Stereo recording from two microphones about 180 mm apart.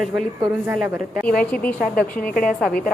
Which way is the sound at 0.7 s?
10° right (ahead or behind).